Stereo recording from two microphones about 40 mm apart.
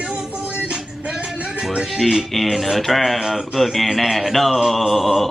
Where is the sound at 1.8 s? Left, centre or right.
Centre.